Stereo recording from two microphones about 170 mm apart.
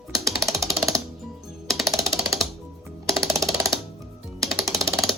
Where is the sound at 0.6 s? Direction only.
Centre (ahead or behind).